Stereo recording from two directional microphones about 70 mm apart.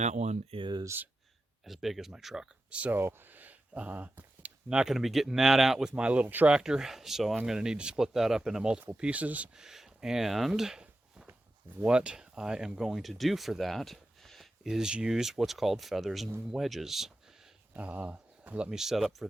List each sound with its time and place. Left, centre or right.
1.6 s speech: centre
2.9 s speech: right
6.6 s speech: centre
9.6 s speech: centre
17.7 s speech: right; by 19.3 s centre